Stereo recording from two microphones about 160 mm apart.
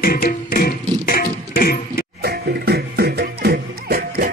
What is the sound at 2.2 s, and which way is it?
Music, 90° right.